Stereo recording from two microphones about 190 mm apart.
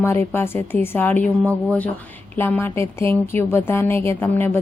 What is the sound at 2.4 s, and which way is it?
Speech, 10° left (ahead or behind).